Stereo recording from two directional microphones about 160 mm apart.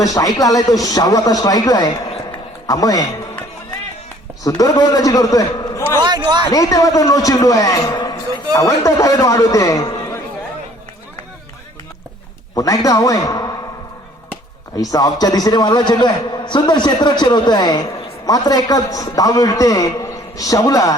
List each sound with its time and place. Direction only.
0.0 s a man's voice: 25° left (ahead or behind)
4.4 s a man's voice: 25° left (ahead or behind)
6.0 s a man's voice: 25° right (ahead or behind)
6.4 s a man's voice: 25° left (ahead or behind)
12.5 s a man's voice: 20° left (ahead or behind)
14.8 s a man's voice: 25° left (ahead or behind)